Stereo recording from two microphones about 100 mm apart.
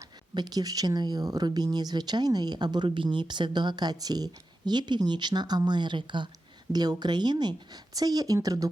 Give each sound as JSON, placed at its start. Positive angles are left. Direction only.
{"t": 0.3, "sound": "speech", "side_deg": -45}